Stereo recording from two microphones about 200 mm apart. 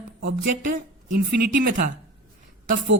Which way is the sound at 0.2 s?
45° right (ahead or behind).